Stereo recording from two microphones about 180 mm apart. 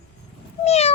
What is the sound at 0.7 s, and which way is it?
Speech, 35° left (ahead or behind).